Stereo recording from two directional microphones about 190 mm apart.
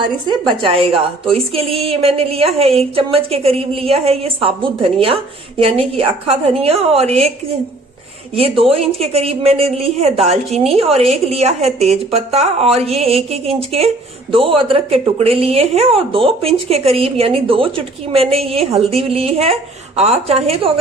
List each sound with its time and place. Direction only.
0.3 s a woman's voice: 25° right (ahead or behind)
8.4 s a woman's voice: 30° right (ahead or behind)